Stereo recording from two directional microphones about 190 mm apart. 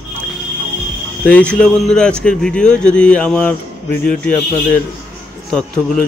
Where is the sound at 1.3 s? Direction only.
5° left (ahead or behind).